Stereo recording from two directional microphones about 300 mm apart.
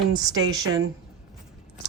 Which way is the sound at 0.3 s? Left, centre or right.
Centre.